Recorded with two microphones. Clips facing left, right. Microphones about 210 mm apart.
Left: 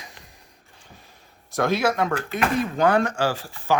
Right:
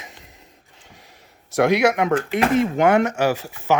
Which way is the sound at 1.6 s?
20° right (ahead or behind).